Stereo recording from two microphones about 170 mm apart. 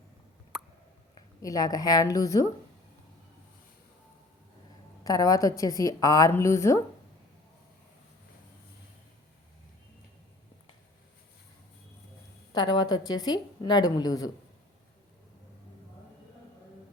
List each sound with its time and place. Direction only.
0.5 s plop: 5° right (ahead or behind)
1.4 s a woman's voice: 20° left (ahead or behind)
5.0 s a woman's voice: 20° left (ahead or behind)
12.5 s a woman's voice: 25° left (ahead or behind)